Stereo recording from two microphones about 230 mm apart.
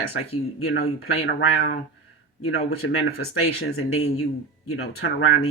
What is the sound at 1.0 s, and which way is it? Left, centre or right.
Speech, left.